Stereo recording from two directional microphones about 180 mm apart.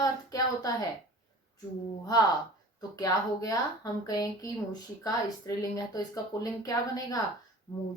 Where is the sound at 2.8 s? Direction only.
20° left (ahead or behind).